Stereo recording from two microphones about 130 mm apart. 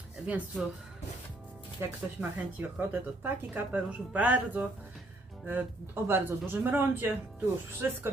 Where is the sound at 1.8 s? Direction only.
20° right (ahead or behind).